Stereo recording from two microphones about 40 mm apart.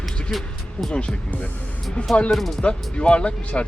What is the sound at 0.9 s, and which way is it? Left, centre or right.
Speech, left.